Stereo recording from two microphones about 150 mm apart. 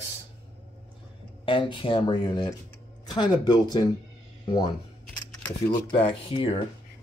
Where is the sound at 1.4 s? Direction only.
35° left (ahead or behind).